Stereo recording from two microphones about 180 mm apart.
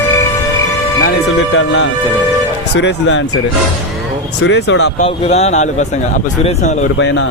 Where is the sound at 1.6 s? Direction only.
90° left.